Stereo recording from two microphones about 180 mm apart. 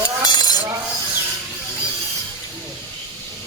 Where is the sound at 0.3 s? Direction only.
25° left (ahead or behind).